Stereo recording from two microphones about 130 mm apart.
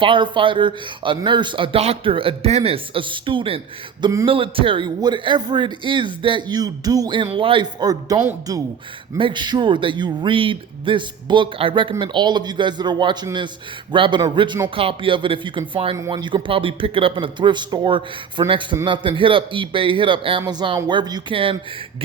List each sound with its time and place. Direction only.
0.0 s a man's voice: 40° right (ahead or behind)
4.0 s a sound: 25° right (ahead or behind)
4.3 s a man's voice: 45° right (ahead or behind)
16.0 s a man's voice: 30° right (ahead or behind)